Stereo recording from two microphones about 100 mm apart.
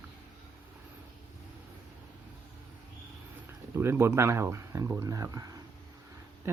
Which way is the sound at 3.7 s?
25° right (ahead or behind).